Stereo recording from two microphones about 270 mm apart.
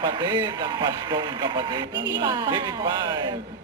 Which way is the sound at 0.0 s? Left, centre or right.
Centre.